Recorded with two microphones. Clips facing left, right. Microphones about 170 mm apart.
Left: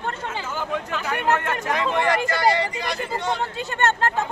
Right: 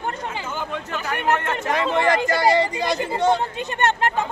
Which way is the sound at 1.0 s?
10° left (ahead or behind).